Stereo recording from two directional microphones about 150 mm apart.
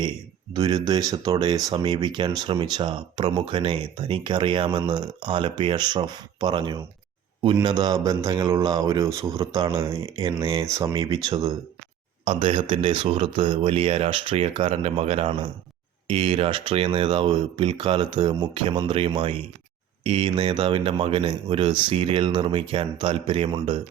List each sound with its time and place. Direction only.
0.5 s speech: 30° right (ahead or behind)
10.9 s speech: 30° right (ahead or behind)
12.2 s speech: 35° right (ahead or behind)